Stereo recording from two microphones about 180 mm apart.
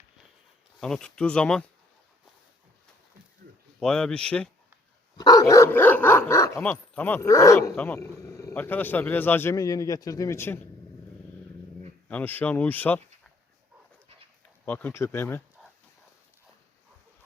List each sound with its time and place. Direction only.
0.8 s speech: 5° left (ahead or behind)
3.8 s speech: 5° left (ahead or behind)
5.1 s speech: 20° left (ahead or behind)
12.0 s speech: 10° left (ahead or behind)
14.6 s speech: 10° left (ahead or behind)